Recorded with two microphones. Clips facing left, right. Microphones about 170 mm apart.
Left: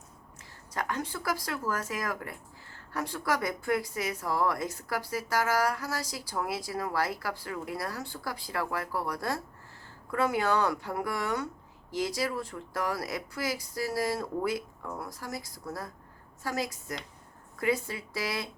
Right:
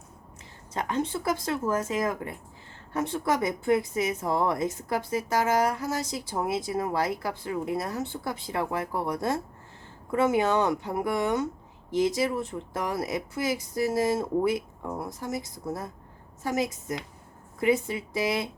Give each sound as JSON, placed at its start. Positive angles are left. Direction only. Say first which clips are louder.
{"t": 0.7, "sound": "speech", "louder": "right 5 dB", "side_deg": -25}